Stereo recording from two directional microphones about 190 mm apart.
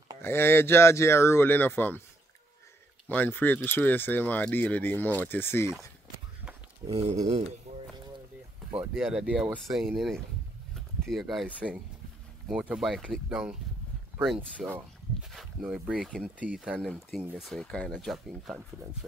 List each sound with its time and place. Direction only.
0.2 s speech: 10° left (ahead or behind)
3.1 s speech: 10° left (ahead or behind)
6.9 s speech: 30° right (ahead or behind)
8.7 s speech: 5° right (ahead or behind)